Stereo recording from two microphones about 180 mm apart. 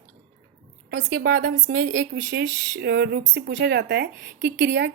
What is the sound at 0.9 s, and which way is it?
Speech, 65° right (ahead or behind).